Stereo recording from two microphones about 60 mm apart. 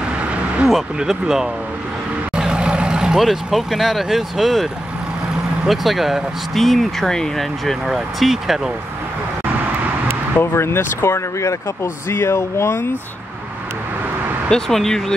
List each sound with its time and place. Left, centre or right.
0.7 s speech: centre
5.7 s speech: centre
10.4 s speech: left
14.5 s speech: centre